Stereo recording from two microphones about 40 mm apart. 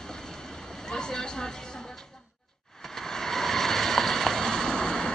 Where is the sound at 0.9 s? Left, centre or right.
Centre.